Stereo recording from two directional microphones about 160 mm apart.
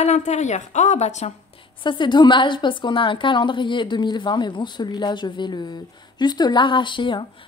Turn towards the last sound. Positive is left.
turn(degrees=30)  # may be behind; listen again after turning